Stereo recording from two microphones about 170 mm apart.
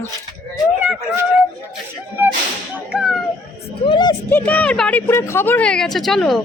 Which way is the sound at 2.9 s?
5° right (ahead or behind).